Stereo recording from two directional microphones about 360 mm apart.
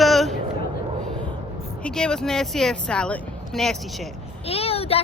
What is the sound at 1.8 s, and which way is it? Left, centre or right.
Speech, centre.